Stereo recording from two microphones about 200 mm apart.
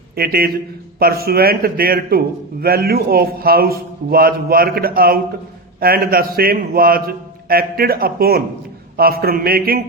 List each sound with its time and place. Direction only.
0.2 s a man's voice: 50° right (ahead or behind)